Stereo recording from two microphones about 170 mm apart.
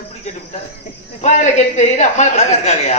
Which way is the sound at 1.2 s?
45° left (ahead or behind).